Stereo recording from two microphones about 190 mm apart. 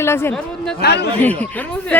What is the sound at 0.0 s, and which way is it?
Speech, 15° left (ahead or behind).